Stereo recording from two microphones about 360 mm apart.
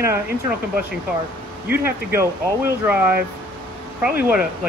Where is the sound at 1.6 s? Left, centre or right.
Centre.